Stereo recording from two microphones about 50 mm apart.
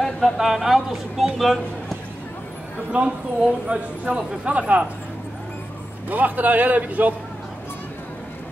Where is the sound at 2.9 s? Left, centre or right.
Right.